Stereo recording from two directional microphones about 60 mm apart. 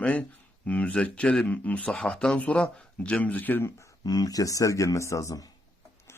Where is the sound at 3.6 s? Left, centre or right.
Left.